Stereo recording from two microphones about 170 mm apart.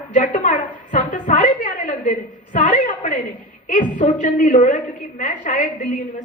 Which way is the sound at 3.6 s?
50° left (ahead or behind).